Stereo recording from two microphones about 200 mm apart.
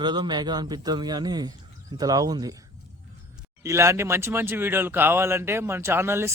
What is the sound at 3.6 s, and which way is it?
Speech, 15° right (ahead or behind).